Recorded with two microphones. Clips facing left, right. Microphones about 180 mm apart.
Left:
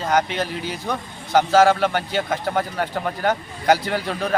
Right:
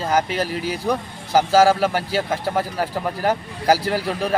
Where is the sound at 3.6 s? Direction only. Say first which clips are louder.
Right 1 dB; 35° right (ahead or behind).